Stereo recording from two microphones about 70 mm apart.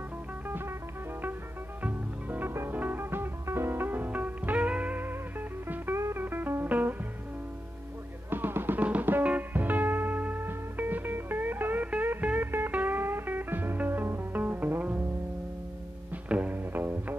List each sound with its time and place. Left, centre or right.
0.5 s music: right
1.8 s music: right
5.9 s music: right
6.2 s music: right
8.3 s music: right
16.1 s music: right